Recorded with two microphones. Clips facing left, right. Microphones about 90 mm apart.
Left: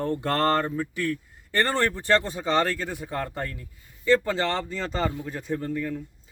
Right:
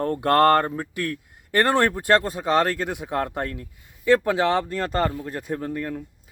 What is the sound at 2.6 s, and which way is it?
Speech, 60° right (ahead or behind).